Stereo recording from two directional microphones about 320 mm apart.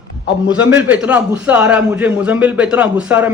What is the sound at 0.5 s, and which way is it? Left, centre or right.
A man's voice, centre.